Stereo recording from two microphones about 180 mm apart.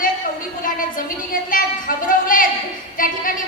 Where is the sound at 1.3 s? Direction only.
50° left (ahead or behind).